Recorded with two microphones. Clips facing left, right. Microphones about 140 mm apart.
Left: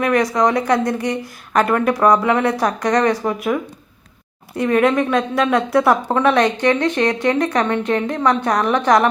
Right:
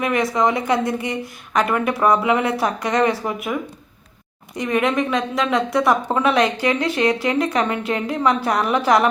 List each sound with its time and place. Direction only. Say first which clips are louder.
0.0 s speech: left 3 dB; 5° right (ahead or behind)
4.7 s speech: left 4 dB; centre (ahead or behind)
6.3 s speech: left 3 dB; 45° left (ahead or behind)
6.7 s speech: left 1 dB; 5° right (ahead or behind)